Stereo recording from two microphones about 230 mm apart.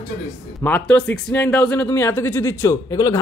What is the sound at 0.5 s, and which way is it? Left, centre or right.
Speech, centre.